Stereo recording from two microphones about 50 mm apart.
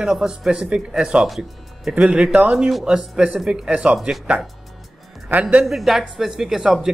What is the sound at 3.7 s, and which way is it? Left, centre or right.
Speech, right.